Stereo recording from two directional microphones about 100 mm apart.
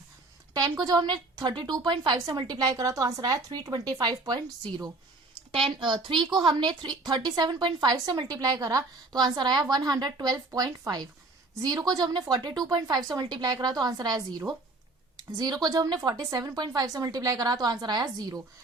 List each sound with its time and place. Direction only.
0.5 s a woman's voice: 40° right (ahead or behind)
5.5 s a woman's voice: 60° right (ahead or behind); by 18.4 s 40° right (ahead or behind)